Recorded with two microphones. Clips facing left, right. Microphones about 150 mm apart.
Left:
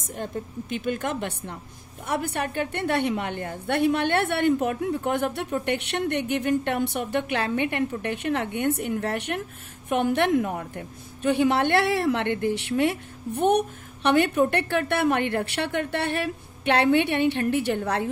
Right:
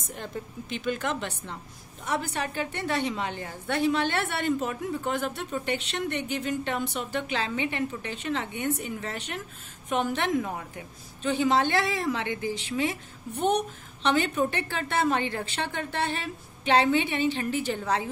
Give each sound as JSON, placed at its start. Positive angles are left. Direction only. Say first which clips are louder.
{"t": 0.0, "sound": "a woman's voice", "louder": "left 4 dB", "side_deg": 50}